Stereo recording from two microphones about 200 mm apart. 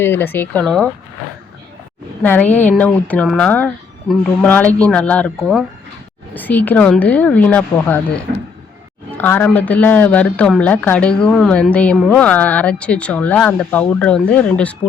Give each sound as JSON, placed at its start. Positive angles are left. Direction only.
{"t": 0.0, "sound": "speech", "side_deg": 10}
{"t": 2.2, "sound": "speech", "side_deg": 10}
{"t": 9.1, "sound": "speech", "side_deg": 10}